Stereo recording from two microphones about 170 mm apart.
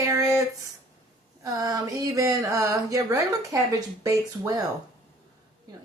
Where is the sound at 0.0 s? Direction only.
20° right (ahead or behind).